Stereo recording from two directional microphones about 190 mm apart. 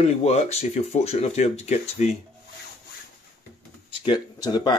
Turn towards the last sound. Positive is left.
turn(degrees=20)  # may be behind; listen again after turning